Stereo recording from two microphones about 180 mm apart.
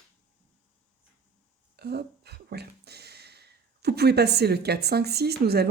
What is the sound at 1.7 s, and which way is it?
Speech, 60° right (ahead or behind).